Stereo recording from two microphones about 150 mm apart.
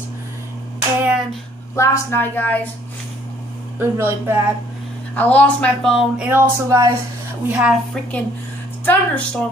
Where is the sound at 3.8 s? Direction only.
15° right (ahead or behind).